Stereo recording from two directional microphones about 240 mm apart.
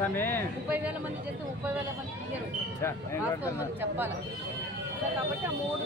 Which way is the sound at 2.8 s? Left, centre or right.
Centre.